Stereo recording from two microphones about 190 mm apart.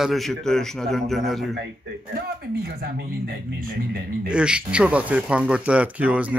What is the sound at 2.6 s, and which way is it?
Speech, 55° right (ahead or behind).